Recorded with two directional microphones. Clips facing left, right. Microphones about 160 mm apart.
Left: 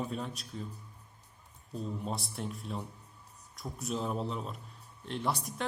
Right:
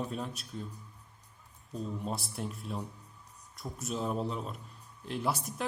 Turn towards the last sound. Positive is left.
turn(degrees=-5)  # may be behind; listen again after turning